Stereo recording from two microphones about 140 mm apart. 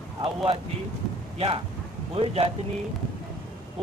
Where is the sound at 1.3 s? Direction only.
45° right (ahead or behind).